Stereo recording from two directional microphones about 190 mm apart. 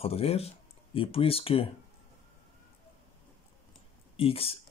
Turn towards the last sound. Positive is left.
turn(degrees=30)  # may be behind; listen again after turning